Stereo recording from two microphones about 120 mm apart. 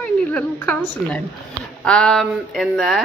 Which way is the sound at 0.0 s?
10° left (ahead or behind).